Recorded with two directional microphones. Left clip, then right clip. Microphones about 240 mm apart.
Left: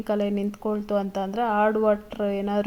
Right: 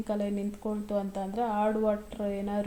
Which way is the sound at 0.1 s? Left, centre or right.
Left.